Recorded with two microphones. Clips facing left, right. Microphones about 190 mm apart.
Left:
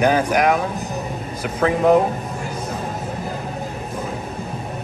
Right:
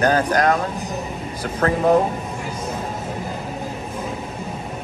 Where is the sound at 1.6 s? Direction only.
10° left (ahead or behind).